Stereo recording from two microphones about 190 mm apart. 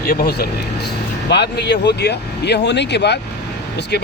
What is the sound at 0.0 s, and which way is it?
Speech, 55° left (ahead or behind).